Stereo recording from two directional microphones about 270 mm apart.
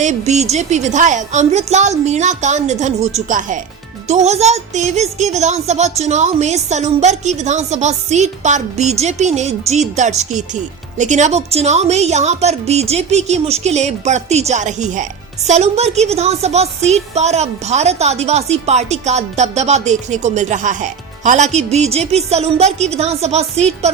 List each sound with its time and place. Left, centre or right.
0.0 s a woman's voice: right